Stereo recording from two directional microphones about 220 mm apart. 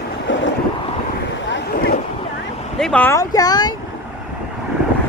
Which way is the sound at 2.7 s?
5° left (ahead or behind).